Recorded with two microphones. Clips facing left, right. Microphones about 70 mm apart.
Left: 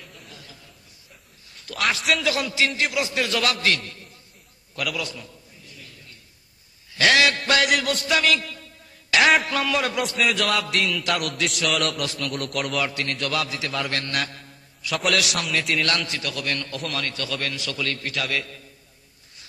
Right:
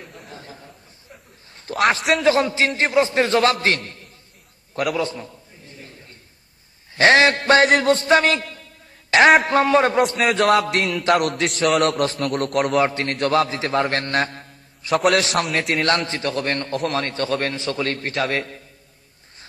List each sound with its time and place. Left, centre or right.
0.0 s chuckle: right
1.9 s a man's voice: right
4.7 s a sound: right
6.9 s a man's voice: right
10.3 s music: right
11.3 s a man's voice: right
15.4 s music: right
15.8 s a man's voice: right